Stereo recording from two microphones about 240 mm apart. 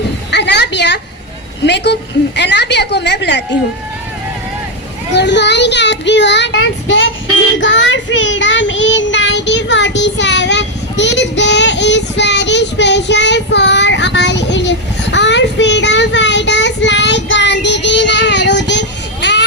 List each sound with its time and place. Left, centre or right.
0.3 s a sound: left
1.6 s speech: left
5.1 s speech: left
7.6 s child singing: left